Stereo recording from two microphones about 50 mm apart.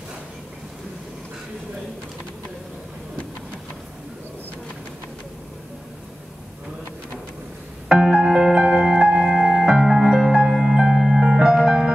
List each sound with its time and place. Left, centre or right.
7.9 s music: centre
9.4 s music: centre